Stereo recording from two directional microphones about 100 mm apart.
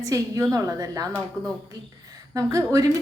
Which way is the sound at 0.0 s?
30° right (ahead or behind).